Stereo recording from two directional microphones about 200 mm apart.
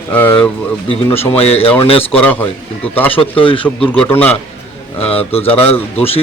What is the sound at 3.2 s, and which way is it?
Speech, 25° left (ahead or behind).